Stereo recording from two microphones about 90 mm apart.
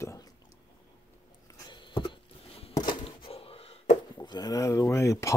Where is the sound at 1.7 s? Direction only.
60° left (ahead or behind).